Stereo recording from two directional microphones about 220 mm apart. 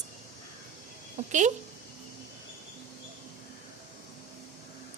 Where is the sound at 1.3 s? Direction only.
35° right (ahead or behind).